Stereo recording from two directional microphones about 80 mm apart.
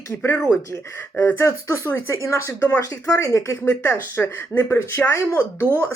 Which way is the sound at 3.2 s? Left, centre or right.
Left.